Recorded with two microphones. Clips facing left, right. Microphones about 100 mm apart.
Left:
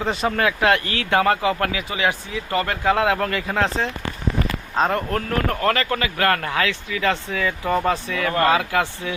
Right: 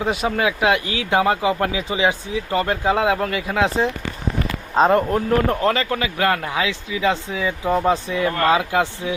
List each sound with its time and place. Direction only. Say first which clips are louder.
0.0 s speech: right 1 dB; 10° right (ahead or behind)
3.2 s speech: right 1 dB; 5° right (ahead or behind)
4.7 s speech: right 6 dB; 20° right (ahead or behind)
8.1 s speech: left 2 dB; 25° right (ahead or behind)